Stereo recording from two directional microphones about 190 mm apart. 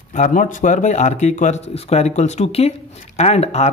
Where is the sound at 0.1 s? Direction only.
40° left (ahead or behind).